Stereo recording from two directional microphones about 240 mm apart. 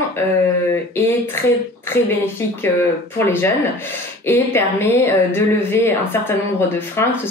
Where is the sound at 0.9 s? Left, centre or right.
Centre.